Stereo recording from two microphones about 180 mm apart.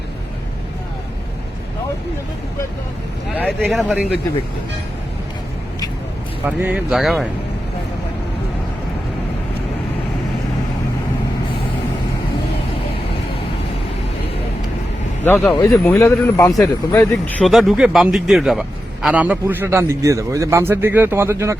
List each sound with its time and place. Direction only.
3.7 s speech: centre (ahead or behind)
6.4 s speech: 10° right (ahead or behind)
15.2 s speech: 10° left (ahead or behind)
17.5 s a man's voice: centre (ahead or behind)